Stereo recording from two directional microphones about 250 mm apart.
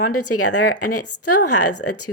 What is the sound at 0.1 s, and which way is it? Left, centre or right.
Speech, left.